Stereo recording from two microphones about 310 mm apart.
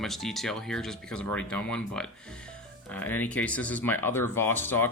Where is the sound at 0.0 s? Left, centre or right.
Centre.